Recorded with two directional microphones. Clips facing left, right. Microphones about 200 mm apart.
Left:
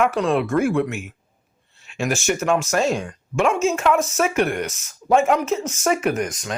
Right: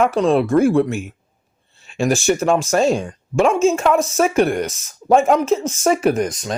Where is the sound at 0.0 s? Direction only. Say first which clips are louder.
Right 4 dB; 30° right (ahead or behind).